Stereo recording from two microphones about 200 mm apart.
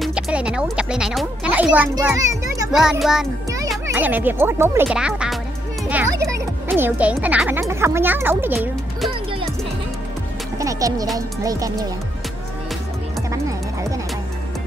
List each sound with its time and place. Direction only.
0.0 s a child's voice: 5° right (ahead or behind)
2.7 s a child's voice: centre (ahead or behind)
3.4 s speech: 15° right (ahead or behind)
10.6 s music: 15° right (ahead or behind)
11.1 s speech: 15° right (ahead or behind)
13.3 s music: 15° right (ahead or behind)